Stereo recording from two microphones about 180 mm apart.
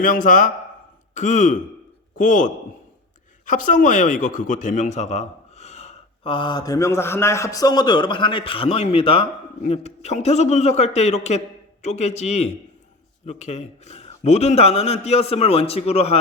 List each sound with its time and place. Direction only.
0.0 s a man's voice: 50° left (ahead or behind)